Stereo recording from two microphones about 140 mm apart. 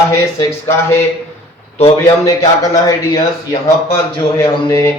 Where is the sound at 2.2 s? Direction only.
25° left (ahead or behind).